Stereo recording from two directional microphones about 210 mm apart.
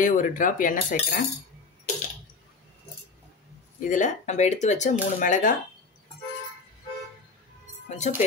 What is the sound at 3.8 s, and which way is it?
Speech, 35° left (ahead or behind).